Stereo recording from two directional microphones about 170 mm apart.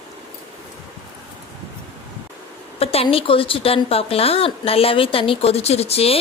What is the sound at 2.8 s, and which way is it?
A woman's voice, 35° left (ahead or behind).